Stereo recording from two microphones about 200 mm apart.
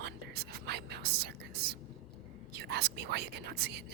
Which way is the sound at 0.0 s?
55° right (ahead or behind).